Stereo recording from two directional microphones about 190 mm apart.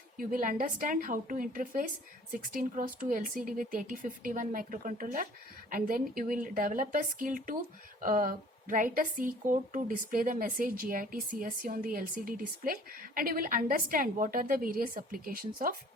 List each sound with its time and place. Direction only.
0.2 s a woman's voice: 45° right (ahead or behind)